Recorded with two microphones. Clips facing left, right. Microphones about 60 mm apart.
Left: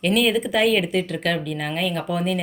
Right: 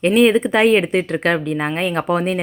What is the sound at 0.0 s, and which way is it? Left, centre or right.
Speech, right.